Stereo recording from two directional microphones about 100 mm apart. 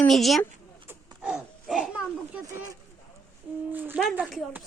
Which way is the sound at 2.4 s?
35° right (ahead or behind).